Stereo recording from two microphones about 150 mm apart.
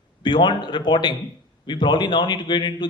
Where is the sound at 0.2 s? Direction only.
30° left (ahead or behind).